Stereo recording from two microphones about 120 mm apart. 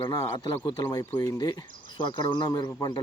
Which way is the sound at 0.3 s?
35° left (ahead or behind).